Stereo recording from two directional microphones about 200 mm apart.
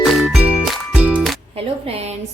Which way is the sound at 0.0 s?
Centre (ahead or behind).